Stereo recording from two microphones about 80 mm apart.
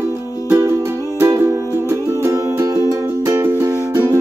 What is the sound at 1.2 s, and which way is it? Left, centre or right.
Music, right.